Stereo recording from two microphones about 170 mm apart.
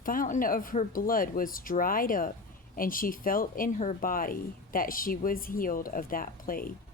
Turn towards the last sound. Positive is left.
turn(degrees=55)  # may be behind; listen again after turning